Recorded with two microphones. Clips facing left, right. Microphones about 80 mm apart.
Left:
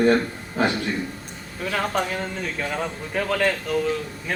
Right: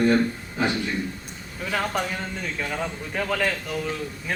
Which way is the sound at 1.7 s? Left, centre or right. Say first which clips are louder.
Left 2 dB; centre.